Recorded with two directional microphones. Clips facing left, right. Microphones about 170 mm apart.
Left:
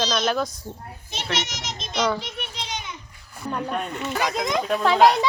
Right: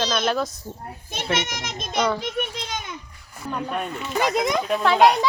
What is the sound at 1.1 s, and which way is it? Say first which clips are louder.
Speech: right 3 dB; 55° right (ahead or behind).